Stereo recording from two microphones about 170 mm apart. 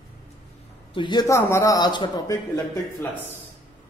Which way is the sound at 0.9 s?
25° left (ahead or behind).